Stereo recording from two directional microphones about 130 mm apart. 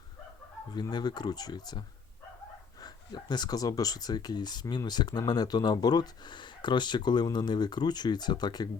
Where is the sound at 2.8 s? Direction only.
35° left (ahead or behind).